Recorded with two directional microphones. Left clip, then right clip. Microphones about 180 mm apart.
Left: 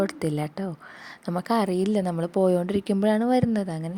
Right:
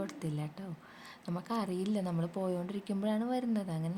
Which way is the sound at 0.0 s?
45° left (ahead or behind).